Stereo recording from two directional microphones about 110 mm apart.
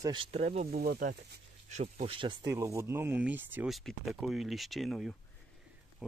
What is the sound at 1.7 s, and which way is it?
Speech, 90° right.